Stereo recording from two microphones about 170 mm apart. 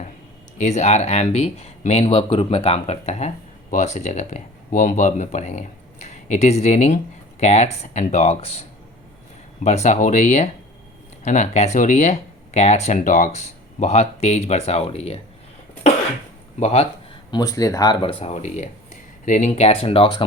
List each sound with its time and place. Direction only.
0.6 s speech: 40° left (ahead or behind)
9.6 s speech: 45° left (ahead or behind)
16.6 s speech: 40° left (ahead or behind)
17.3 s speech: 20° left (ahead or behind)
18.2 s speech: 40° left (ahead or behind)